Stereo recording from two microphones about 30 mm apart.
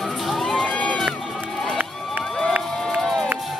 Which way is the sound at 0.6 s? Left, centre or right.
Left.